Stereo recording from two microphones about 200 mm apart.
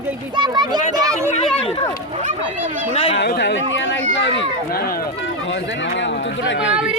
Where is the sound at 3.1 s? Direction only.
60° left (ahead or behind).